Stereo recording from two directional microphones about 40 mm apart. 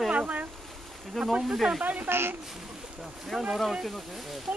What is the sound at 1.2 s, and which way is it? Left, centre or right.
Speech, right.